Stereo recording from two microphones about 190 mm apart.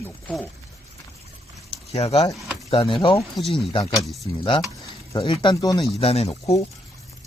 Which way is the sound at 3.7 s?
20° left (ahead or behind).